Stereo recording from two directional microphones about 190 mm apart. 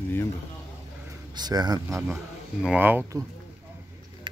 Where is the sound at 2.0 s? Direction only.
5° right (ahead or behind).